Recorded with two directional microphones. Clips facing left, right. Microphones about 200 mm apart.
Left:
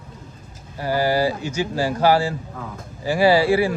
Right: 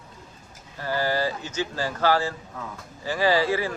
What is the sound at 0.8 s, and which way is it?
A man's voice, 10° left (ahead or behind).